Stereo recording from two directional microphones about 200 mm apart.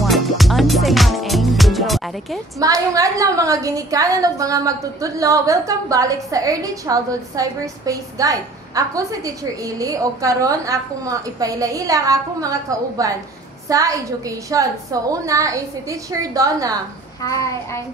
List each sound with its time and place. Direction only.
0.0 s music: centre (ahead or behind)
2.6 s a woman's voice: 15° right (ahead or behind)
17.2 s a child's voice: 15° left (ahead or behind)